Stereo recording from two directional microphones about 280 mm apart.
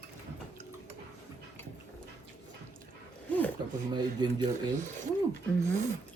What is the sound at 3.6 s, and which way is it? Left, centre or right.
Speech, centre.